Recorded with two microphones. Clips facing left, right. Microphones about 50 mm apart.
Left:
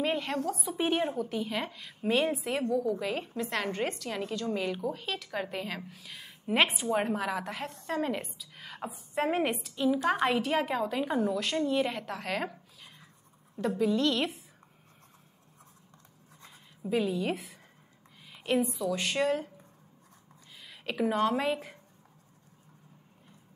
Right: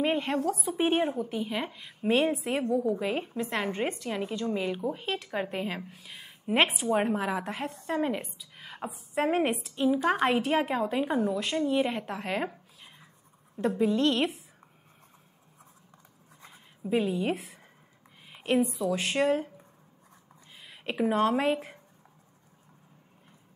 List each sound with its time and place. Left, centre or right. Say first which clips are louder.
0.0 s speech: right 3 dB; right
0.5 s a woman's voice: right 4 dB; right
0.7 s a woman's voice: right 2 dB; right
2.7 s speech: right 3 dB; right
3.3 s a woman's voice: right 1 dB; centre
4.9 s a woman's voice: right 3 dB; right
11.1 s speech: right 1 dB; centre; by 14.2 s right
16.4 s speech: right 2 dB; centre
18.3 s a sound: right 2 dB; right
18.9 s speech: right 3 dB; right
20.6 s speech: right 2 dB; right